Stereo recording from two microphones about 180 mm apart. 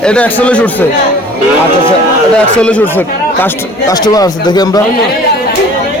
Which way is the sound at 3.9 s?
20° left (ahead or behind).